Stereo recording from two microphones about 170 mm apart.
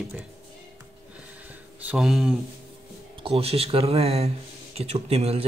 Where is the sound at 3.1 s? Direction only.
35° right (ahead or behind).